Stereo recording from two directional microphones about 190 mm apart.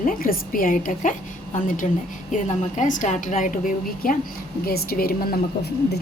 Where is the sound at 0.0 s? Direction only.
45° left (ahead or behind).